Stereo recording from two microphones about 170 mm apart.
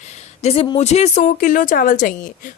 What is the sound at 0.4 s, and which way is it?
A woman's voice, 35° left (ahead or behind).